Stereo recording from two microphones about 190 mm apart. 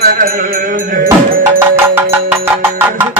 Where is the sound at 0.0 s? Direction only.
50° right (ahead or behind).